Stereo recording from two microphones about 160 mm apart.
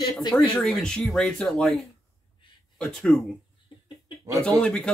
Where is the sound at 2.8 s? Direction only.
5° left (ahead or behind).